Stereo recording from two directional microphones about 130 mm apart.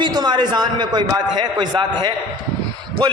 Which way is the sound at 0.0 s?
35° right (ahead or behind).